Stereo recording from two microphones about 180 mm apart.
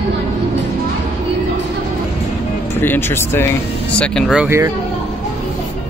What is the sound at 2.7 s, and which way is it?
Speech, 10° left (ahead or behind).